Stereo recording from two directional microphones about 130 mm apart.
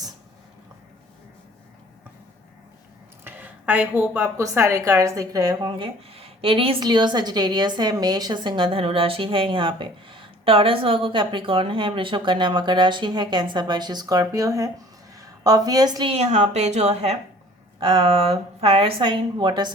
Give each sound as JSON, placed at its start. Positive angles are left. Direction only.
{"t": 3.2, "sound": "a sound", "side_deg": -15}
{"t": 4.1, "sound": "a woman's voice", "side_deg": -20}
{"t": 16.0, "sound": "a woman's voice", "side_deg": -55}
{"t": 17.7, "sound": "speech", "side_deg": -45}